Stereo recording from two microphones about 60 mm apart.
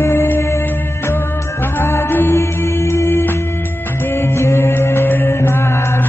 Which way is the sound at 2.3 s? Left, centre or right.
Left.